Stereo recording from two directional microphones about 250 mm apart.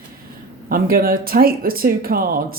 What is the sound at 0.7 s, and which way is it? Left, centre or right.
A woman's voice, right.